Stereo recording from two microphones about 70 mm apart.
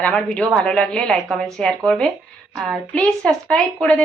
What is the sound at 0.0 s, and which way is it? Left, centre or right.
A woman's voice, centre.